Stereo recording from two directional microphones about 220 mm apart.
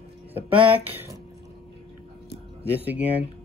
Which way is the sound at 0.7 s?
10° right (ahead or behind).